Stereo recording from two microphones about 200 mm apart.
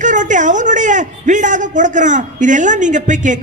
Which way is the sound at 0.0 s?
40° right (ahead or behind).